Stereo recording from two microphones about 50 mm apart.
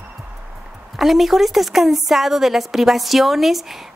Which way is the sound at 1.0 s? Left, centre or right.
Centre.